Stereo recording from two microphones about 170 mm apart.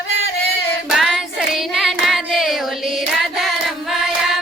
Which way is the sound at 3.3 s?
Centre (ahead or behind).